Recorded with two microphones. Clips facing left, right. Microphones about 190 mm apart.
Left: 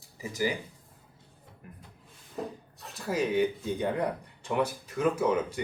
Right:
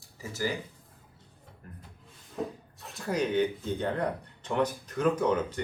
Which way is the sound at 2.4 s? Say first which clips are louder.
Right 2 dB; centre (ahead or behind).